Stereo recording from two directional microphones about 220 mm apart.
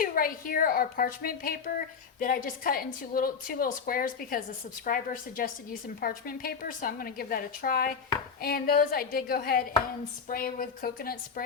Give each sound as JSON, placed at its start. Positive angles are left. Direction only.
{"t": 0.0, "sound": "a woman's voice", "side_deg": 40}